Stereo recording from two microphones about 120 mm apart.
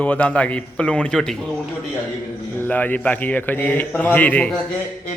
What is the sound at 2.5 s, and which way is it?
A man's voice, 15° left (ahead or behind).